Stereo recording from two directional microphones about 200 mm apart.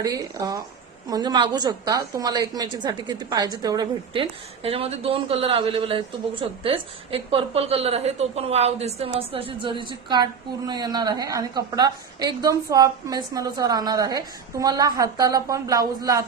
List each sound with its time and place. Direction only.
0.0 s a woman's voice: 15° right (ahead or behind)